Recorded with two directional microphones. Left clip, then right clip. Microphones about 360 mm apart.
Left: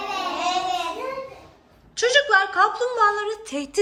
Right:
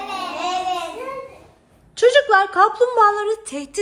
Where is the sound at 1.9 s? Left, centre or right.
Centre.